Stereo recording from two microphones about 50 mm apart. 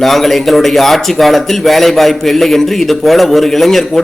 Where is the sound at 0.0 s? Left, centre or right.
Centre.